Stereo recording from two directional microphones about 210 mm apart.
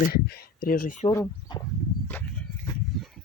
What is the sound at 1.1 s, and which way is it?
Speech, 15° left (ahead or behind).